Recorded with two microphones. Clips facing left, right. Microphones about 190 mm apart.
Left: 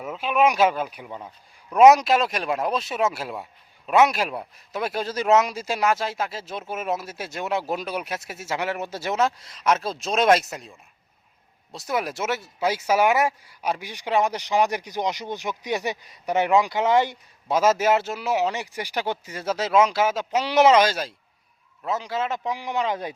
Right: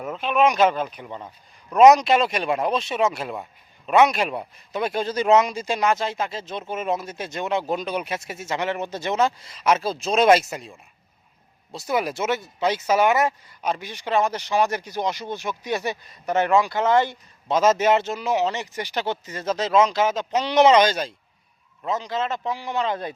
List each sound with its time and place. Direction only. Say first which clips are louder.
0.0 s speech: right 1 dB; 5° left (ahead or behind)
11.7 s speech: right 2 dB; centre (ahead or behind)